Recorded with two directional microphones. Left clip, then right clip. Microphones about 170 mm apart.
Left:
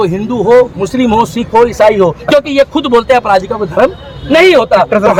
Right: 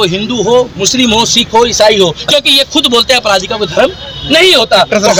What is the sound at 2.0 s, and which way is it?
A man's voice, 10° left (ahead or behind).